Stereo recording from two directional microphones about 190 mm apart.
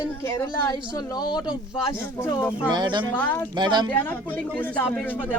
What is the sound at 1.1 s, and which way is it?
Speech, 20° left (ahead or behind).